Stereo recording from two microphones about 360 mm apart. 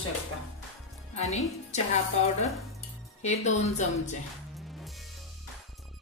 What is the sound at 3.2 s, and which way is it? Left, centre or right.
Speech, centre.